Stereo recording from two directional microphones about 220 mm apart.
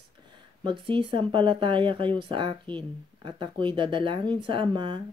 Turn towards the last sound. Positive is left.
turn(degrees=-20)  # may be behind; listen again after turning